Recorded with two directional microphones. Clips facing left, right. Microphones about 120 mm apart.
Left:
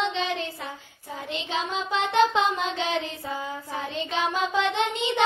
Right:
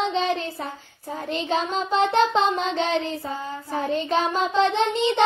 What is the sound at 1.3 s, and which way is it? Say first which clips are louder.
Music: right 5 dB; 40° right (ahead or behind).